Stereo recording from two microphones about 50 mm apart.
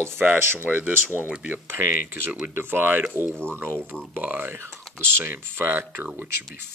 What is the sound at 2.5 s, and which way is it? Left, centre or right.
Speech, right.